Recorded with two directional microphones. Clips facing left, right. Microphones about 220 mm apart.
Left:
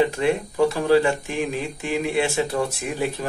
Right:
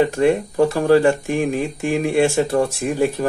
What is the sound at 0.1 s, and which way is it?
Speech, 50° right (ahead or behind).